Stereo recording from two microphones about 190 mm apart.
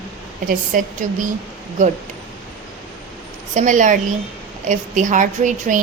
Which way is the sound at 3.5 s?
40° right (ahead or behind).